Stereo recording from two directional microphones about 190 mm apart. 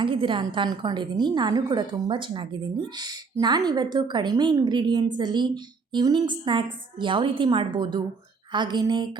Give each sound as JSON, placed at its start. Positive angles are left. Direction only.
{"t": 0.0, "sound": "a woman's voice", "side_deg": -25}